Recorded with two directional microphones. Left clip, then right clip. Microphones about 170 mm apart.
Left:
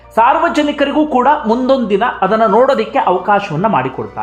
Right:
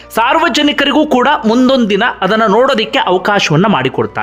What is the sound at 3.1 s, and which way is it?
Speech, 35° right (ahead or behind).